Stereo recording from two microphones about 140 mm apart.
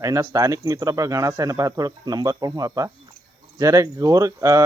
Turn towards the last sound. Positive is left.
turn(degrees=-25)  # may be behind; listen again after turning